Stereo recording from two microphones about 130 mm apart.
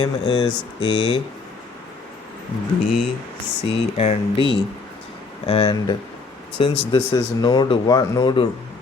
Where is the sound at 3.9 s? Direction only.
55° left (ahead or behind); by 8.4 s 35° left (ahead or behind).